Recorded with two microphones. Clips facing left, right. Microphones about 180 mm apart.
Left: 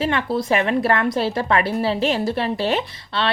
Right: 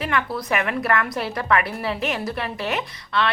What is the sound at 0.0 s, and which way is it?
A woman's voice, 30° left (ahead or behind).